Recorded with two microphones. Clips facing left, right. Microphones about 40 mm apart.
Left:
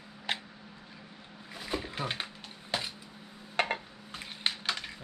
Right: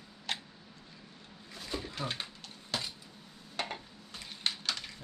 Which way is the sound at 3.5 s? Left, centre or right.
Left.